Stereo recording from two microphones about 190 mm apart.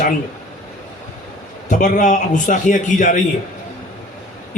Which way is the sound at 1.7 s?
40° left (ahead or behind).